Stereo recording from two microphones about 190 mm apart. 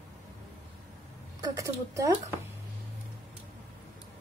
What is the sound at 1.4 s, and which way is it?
Speech, 15° right (ahead or behind).